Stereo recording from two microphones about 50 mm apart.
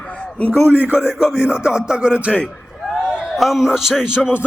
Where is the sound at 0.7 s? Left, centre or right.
Right.